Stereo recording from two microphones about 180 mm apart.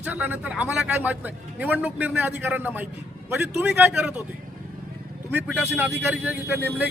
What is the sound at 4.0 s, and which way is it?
Speech, 5° right (ahead or behind).